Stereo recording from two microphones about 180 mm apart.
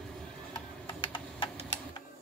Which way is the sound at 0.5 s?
25° left (ahead or behind).